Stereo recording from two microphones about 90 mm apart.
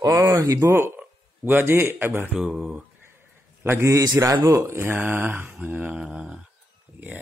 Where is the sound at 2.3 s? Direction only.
5° right (ahead or behind).